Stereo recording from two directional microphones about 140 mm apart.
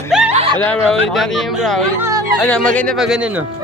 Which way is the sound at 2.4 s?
10° left (ahead or behind).